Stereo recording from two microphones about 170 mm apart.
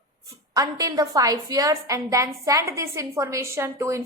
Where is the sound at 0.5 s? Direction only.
20° right (ahead or behind).